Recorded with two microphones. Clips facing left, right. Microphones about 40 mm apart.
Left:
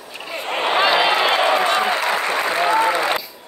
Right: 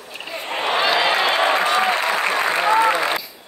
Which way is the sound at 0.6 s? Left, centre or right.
Centre.